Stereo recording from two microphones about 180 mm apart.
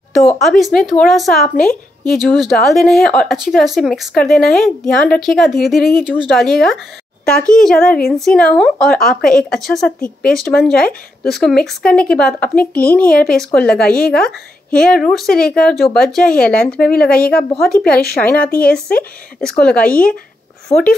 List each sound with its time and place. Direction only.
0.4 s speech: centre (ahead or behind)